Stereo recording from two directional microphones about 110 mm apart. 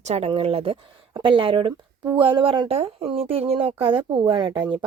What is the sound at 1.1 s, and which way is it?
Speech, 50° right (ahead or behind).